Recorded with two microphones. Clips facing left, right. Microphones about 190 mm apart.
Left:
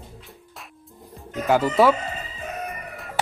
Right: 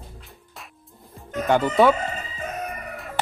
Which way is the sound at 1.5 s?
5° left (ahead or behind).